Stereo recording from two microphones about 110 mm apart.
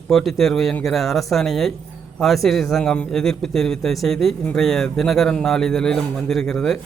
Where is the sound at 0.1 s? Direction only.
Centre (ahead or behind).